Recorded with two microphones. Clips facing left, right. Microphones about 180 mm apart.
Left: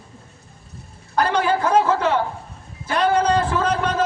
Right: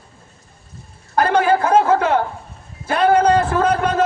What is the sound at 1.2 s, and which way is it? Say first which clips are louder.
Speech: right 4 dB; 50° right (ahead or behind).